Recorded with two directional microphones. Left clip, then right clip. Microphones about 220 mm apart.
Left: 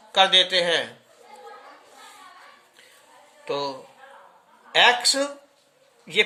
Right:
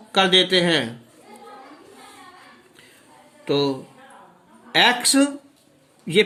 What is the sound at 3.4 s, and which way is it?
A man's voice, 15° right (ahead or behind).